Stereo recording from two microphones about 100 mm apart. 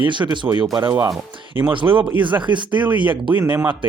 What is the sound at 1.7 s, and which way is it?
Speech, 60° right (ahead or behind).